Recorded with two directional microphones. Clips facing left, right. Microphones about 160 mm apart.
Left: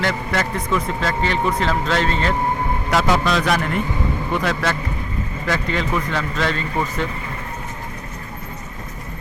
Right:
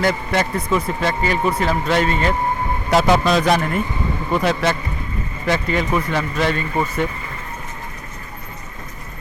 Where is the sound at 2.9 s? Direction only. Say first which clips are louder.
Right 4 dB; 25° right (ahead or behind).